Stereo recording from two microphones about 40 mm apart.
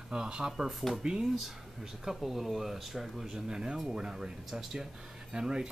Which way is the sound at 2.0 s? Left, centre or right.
Centre.